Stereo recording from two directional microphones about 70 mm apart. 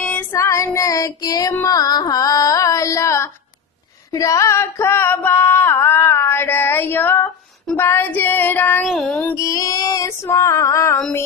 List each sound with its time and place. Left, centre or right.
0.0 s female singing: left
0.3 s female singing: left
0.7 s child singing: left
1.6 s music: left
4.1 s a sound: left
7.7 s child singing: left
8.8 s music: centre
9.3 s child singing: left